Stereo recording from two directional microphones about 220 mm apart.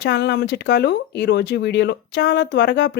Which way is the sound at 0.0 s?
50° left (ahead or behind).